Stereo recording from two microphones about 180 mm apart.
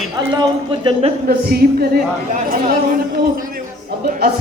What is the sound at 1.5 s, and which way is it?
A man's voice, 60° right (ahead or behind).